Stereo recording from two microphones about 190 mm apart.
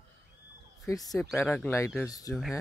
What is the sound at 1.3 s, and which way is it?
Speech, 5° left (ahead or behind).